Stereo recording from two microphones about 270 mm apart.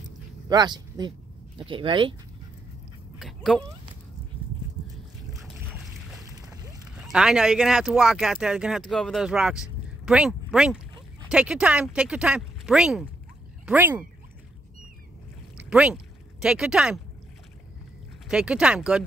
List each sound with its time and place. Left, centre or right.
0.5 s speech: centre
3.2 s dog: centre
7.1 s speech: centre
15.5 s speech: centre
18.3 s speech: centre